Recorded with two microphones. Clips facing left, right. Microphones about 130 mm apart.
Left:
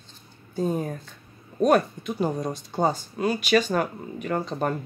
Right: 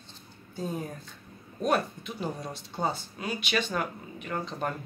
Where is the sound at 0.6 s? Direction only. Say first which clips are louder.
Left 8 dB; 50° left (ahead or behind).